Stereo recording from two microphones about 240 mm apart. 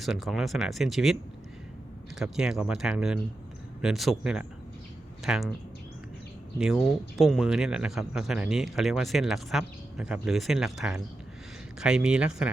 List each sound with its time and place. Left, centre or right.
0.0 s speech: centre
6.6 s speech: centre